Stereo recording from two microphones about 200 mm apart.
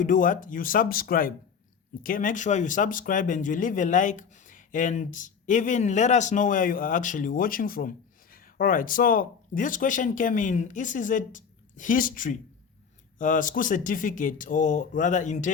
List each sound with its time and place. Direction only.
0.0 s speech: 40° left (ahead or behind)